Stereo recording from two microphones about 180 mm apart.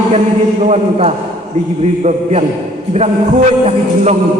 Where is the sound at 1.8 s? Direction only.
35° right (ahead or behind).